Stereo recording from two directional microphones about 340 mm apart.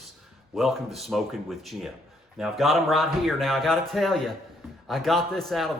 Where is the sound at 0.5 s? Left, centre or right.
Centre.